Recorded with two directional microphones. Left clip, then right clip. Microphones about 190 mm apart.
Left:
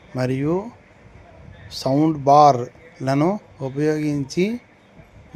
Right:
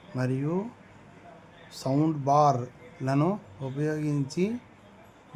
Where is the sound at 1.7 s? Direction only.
20° left (ahead or behind).